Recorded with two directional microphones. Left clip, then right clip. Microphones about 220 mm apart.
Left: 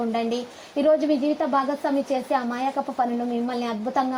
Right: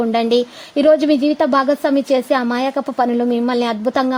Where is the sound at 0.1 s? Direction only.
55° right (ahead or behind).